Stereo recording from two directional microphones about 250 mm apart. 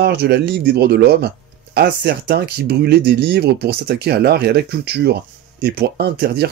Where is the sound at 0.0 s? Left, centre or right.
Right.